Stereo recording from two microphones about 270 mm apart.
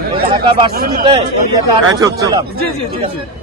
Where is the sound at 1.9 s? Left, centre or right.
Centre.